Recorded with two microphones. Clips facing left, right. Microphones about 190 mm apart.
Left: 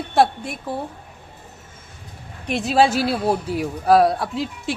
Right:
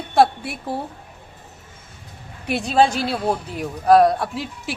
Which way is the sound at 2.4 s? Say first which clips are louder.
Even; centre (ahead or behind).